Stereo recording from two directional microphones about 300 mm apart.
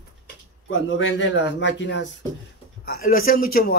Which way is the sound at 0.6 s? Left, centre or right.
Left.